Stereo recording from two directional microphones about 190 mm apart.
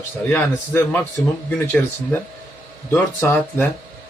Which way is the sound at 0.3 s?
10° left (ahead or behind).